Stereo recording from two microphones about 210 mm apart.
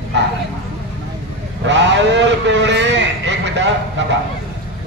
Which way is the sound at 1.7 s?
60° right (ahead or behind).